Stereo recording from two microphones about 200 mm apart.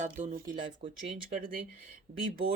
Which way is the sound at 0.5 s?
25° right (ahead or behind).